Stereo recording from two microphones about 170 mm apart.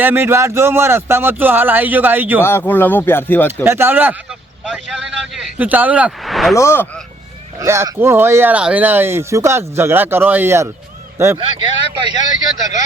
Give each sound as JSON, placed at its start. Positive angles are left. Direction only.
{"t": 0.0, "sound": "speech", "side_deg": -15}
{"t": 2.4, "sound": "speech", "side_deg": 15}
{"t": 3.6, "sound": "speech", "side_deg": -15}
{"t": 6.5, "sound": "speech", "side_deg": 15}
{"t": 7.6, "sound": "speech", "side_deg": -15}